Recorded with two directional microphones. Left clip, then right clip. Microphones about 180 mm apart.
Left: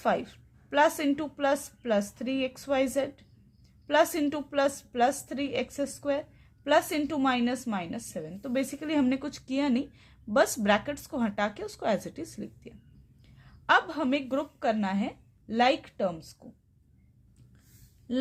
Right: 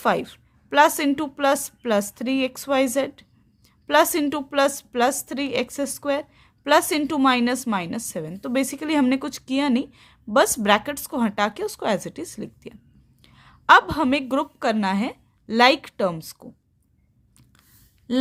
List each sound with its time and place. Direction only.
0.0 s a woman's voice: 30° right (ahead or behind)